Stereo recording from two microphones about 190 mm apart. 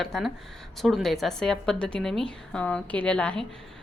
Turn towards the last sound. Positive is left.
turn(degrees=5)  # may be behind; listen again after turning